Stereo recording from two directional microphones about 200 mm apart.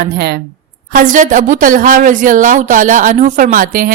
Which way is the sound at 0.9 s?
40° right (ahead or behind).